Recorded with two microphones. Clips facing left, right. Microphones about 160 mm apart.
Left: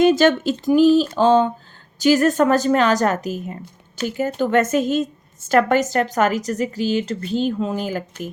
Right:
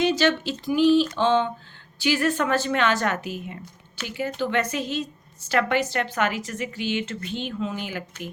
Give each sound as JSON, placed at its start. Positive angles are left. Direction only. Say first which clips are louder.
{"t": 0.0, "sound": "a woman's voice", "louder": "left 7 dB", "side_deg": 50}